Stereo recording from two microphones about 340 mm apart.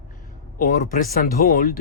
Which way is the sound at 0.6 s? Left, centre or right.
Left.